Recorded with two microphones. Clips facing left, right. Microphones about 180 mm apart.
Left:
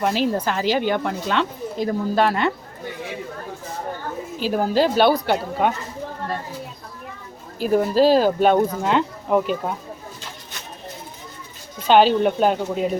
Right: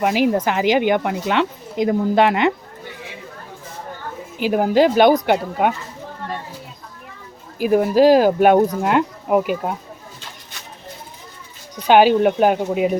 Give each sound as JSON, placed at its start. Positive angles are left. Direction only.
{"t": 0.0, "sound": "speech", "side_deg": -15}
{"t": 4.4, "sound": "speech", "side_deg": -15}
{"t": 7.6, "sound": "speech", "side_deg": -10}
{"t": 11.9, "sound": "speech", "side_deg": -10}